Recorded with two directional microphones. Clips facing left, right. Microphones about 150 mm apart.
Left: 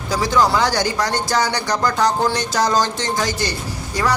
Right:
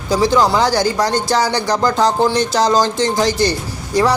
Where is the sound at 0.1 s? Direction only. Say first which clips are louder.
Right 4 dB; 25° right (ahead or behind).